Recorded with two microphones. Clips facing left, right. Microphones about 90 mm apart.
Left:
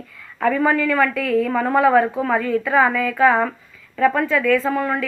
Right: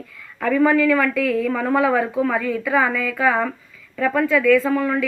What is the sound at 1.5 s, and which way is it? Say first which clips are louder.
Speech: left 1 dB; 20° left (ahead or behind).